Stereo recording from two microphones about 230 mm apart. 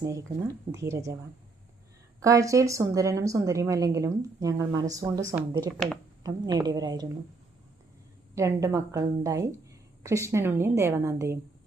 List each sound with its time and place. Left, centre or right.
0.0 s a woman's voice: centre
2.2 s a woman's voice: centre
6.2 s a woman's voice: centre
8.4 s a woman's voice: centre